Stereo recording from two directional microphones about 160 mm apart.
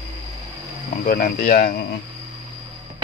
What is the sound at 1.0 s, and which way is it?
Speech, 65° left (ahead or behind).